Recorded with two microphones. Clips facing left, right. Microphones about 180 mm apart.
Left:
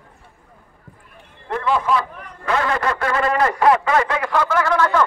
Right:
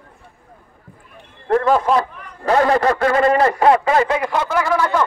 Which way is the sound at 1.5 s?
40° right (ahead or behind).